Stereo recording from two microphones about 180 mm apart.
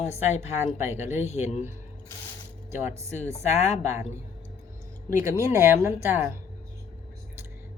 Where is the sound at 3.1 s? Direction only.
40° left (ahead or behind).